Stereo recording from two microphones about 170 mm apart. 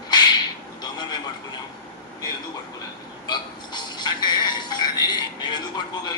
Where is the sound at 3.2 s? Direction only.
25° left (ahead or behind).